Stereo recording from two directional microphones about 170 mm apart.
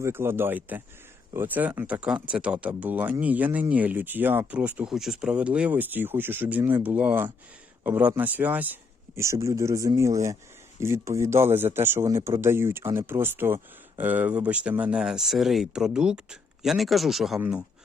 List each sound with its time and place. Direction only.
0.0 s speech: 15° right (ahead or behind)